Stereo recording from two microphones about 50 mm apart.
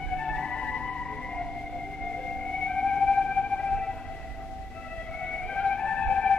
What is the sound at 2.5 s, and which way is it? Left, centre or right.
Theremin, centre.